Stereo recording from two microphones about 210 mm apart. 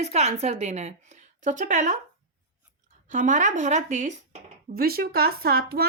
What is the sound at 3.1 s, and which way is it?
Speech, 35° right (ahead or behind).